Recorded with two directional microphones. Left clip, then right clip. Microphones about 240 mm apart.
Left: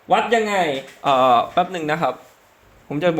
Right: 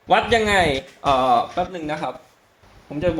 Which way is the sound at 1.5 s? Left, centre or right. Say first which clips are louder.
Left 5 dB; left.